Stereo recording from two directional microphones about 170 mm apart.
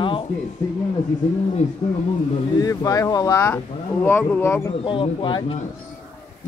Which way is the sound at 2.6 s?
20° left (ahead or behind).